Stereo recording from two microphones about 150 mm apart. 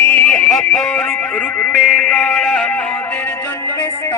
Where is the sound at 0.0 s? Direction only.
15° left (ahead or behind).